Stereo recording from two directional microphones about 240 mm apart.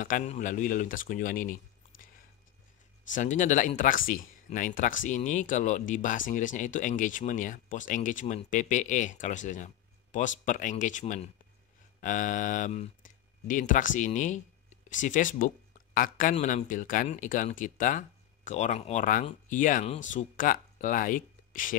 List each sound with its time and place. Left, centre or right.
0.0 s speech: left
3.1 s speech: left